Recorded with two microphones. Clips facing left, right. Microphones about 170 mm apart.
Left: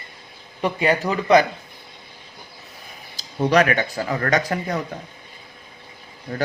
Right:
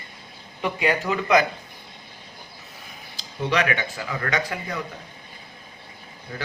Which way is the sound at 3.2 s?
40° left (ahead or behind).